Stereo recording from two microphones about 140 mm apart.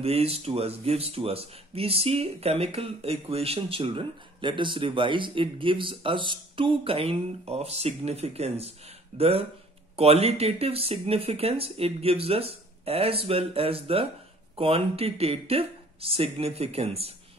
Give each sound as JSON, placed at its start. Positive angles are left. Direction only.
{"t": 0.0, "sound": "speech", "side_deg": -45}